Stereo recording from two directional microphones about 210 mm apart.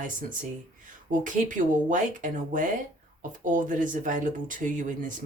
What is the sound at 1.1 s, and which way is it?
Speech, 40° right (ahead or behind).